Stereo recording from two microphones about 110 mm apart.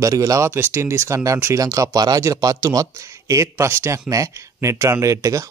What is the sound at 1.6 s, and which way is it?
Speech, 30° right (ahead or behind).